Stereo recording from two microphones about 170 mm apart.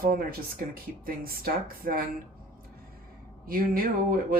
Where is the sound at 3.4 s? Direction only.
60° right (ahead or behind).